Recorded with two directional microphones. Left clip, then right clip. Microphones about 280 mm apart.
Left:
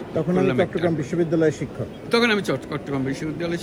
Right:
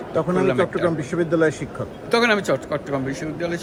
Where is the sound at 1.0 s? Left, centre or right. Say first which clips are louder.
Right 2 dB; centre.